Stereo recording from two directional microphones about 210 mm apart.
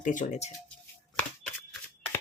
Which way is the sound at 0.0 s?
35° left (ahead or behind).